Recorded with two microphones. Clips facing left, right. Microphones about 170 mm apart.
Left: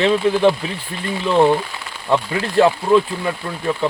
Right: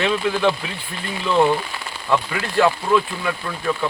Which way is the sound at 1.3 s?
30° left (ahead or behind).